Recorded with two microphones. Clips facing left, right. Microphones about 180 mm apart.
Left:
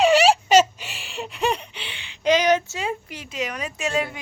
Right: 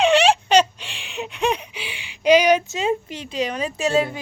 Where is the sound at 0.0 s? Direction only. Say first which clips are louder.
Even; centre (ahead or behind).